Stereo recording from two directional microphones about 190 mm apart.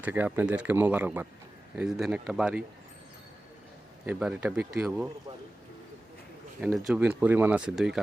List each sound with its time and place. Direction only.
0.0 s speech: 10° right (ahead or behind)
4.0 s speech: 5° right (ahead or behind)
6.6 s speech: 5° right (ahead or behind)